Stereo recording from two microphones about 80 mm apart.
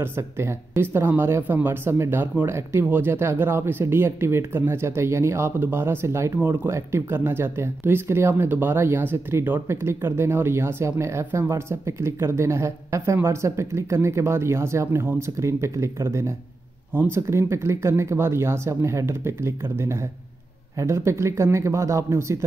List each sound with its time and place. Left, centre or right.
0.0 s speech: right